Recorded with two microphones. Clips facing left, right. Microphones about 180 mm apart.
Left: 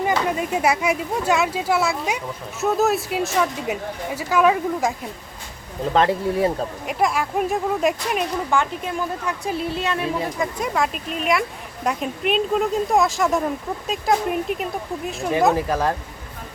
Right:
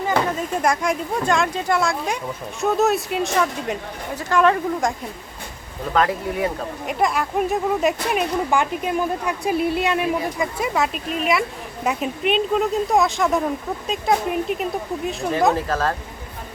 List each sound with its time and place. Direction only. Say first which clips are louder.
0.3 s speech: left 1 dB; 10° left (ahead or behind)
5.9 s speech: left 2 dB; 30° left (ahead or behind)
6.8 s speech: right 1 dB; centre (ahead or behind)
8.4 s speech: right 2 dB; 15° right (ahead or behind)
15.5 s speech: left 1 dB; 15° left (ahead or behind)